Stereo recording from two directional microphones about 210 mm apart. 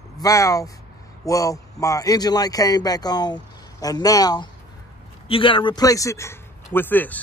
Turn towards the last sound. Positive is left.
turn(degrees=10)  # may be behind; listen again after turning